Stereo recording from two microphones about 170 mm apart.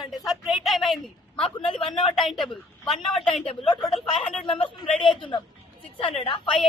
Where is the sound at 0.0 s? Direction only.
Centre (ahead or behind).